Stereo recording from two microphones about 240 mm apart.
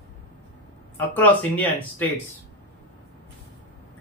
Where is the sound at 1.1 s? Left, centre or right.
Centre.